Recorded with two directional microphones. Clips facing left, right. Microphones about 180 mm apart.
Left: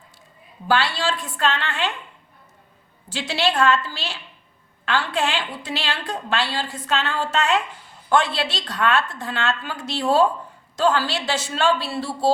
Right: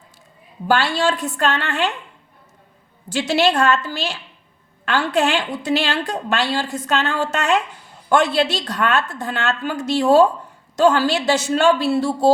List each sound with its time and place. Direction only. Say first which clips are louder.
0.7 s a woman's voice: right 4 dB; 40° right (ahead or behind)
3.2 s a woman's voice: right 3 dB; 45° right (ahead or behind)